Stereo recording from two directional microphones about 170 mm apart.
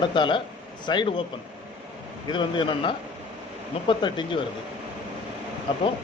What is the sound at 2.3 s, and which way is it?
A man's voice, 30° left (ahead or behind).